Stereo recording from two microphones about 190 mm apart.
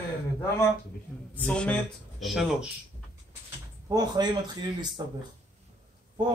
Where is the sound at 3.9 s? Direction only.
20° right (ahead or behind).